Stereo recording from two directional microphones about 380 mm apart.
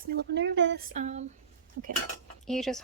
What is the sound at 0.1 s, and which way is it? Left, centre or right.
Speech, right.